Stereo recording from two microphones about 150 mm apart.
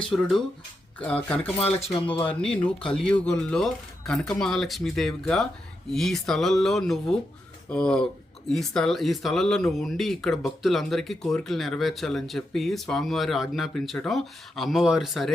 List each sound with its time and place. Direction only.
0.1 s speech: centre (ahead or behind)
1.5 s speech: 40° left (ahead or behind)
2.2 s speech: 5° left (ahead or behind)